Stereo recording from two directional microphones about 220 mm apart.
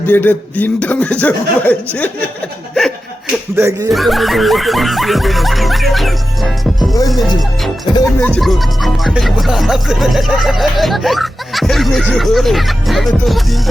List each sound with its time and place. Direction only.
0.0 s speech: 10° left (ahead or behind)
3.5 s speech: 15° right (ahead or behind)
3.9 s music: centre (ahead or behind)